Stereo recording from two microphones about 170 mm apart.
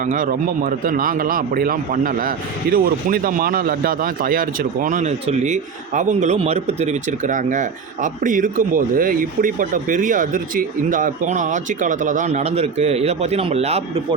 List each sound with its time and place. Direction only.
0.0 s a man's voice: 55° right (ahead or behind)